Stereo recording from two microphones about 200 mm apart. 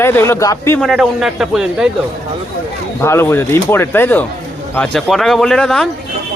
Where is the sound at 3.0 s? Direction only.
10° left (ahead or behind).